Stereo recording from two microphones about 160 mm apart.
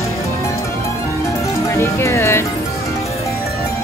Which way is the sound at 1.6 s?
15° left (ahead or behind).